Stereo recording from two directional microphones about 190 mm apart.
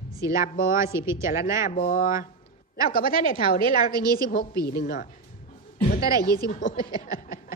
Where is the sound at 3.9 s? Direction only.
20° right (ahead or behind).